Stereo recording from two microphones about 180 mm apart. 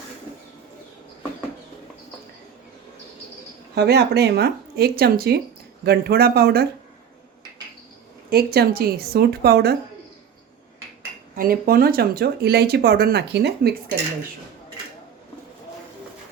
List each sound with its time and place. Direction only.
3.8 s speech: 65° right (ahead or behind)
8.3 s speech: 60° right (ahead or behind)
11.3 s speech: 55° right (ahead or behind)